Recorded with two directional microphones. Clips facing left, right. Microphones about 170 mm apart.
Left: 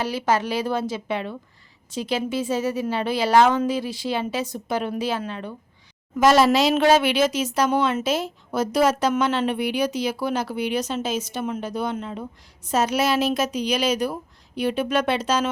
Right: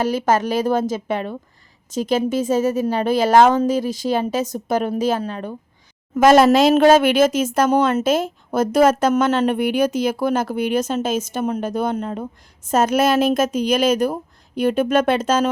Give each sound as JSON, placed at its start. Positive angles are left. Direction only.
{"t": 0.0, "sound": "a woman's voice", "side_deg": -45}